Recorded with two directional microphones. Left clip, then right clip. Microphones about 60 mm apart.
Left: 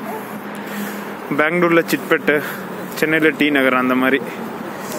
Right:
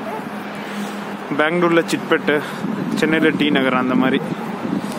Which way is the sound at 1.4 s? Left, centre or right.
Left.